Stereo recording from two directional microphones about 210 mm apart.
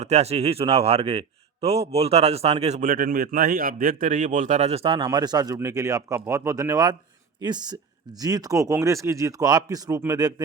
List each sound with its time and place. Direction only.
0.0 s a man's voice: 30° right (ahead or behind)